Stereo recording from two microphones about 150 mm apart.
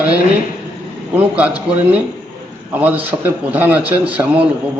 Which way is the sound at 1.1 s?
10° right (ahead or behind).